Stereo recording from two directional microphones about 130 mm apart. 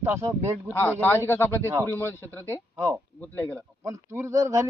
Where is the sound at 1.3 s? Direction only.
20° left (ahead or behind).